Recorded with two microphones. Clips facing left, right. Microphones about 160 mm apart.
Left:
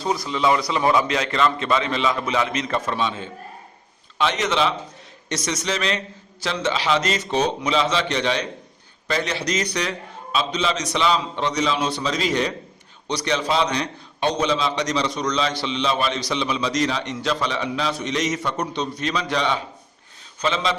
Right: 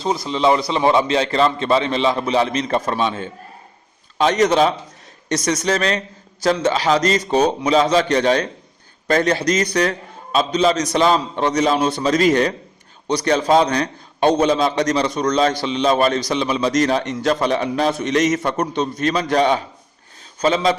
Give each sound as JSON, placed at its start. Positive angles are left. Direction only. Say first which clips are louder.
{"t": 0.0, "sound": "a man's voice", "louder": "right 4 dB", "side_deg": -25}